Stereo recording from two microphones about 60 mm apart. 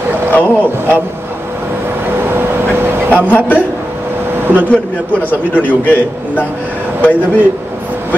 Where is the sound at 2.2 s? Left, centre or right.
Right.